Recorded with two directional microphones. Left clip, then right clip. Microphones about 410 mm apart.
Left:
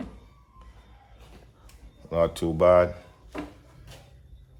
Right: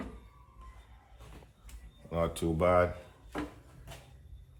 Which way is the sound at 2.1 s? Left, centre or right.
Left.